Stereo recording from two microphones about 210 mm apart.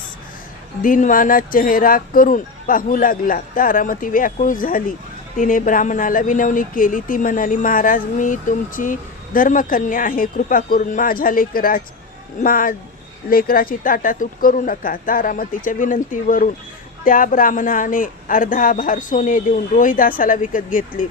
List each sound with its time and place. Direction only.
0.8 s speech: 40° left (ahead or behind)